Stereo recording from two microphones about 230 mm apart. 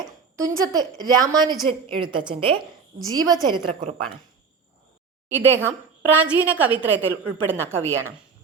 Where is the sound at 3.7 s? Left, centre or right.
Right.